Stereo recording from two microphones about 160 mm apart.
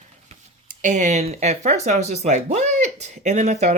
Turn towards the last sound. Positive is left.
turn(degrees=-45)  # may be behind; listen again after turning